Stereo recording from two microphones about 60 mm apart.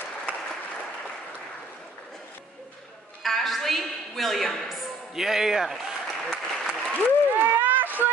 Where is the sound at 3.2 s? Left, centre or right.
Centre.